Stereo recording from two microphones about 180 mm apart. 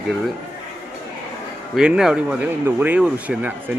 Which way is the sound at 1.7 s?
5° right (ahead or behind).